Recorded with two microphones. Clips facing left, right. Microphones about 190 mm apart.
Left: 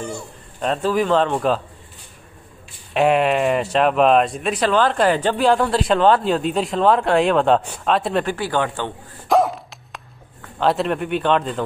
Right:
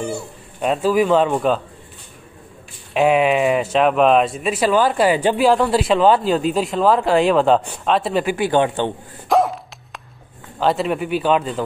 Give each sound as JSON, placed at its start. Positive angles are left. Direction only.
{"t": 0.0, "sound": "speech", "side_deg": -10}
{"t": 2.9, "sound": "speech", "side_deg": 0}
{"t": 8.4, "sound": "a man's voice", "side_deg": -20}
{"t": 9.3, "sound": "dog", "side_deg": 0}
{"t": 10.6, "sound": "speech", "side_deg": 0}